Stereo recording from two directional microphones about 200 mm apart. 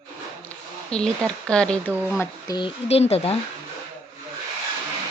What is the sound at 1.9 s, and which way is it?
Speech, 10° right (ahead or behind).